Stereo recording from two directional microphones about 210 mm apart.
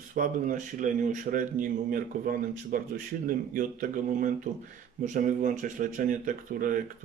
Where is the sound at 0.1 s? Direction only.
40° right (ahead or behind).